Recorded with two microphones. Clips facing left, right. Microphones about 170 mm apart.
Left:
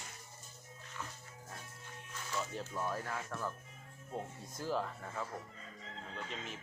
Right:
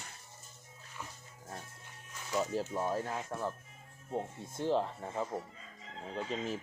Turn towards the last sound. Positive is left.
turn(degrees=-35)  # may be behind; listen again after turning